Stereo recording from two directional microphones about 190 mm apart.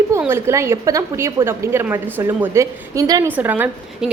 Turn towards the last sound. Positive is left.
turn(degrees=-10)  # may be behind; listen again after turning